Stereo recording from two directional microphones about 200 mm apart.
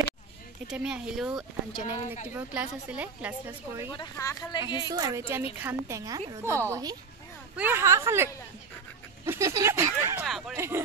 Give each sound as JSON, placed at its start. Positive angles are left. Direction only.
{"t": 0.7, "sound": "a woman's voice", "side_deg": -5}
{"t": 3.9, "sound": "speech", "side_deg": 20}
{"t": 4.9, "sound": "a woman's voice", "side_deg": -15}
{"t": 9.2, "sound": "a sound", "side_deg": -15}
{"t": 10.2, "sound": "a woman's voice", "side_deg": 0}